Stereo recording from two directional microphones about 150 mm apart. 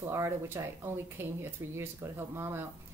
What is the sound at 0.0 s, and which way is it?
Speech, 20° right (ahead or behind).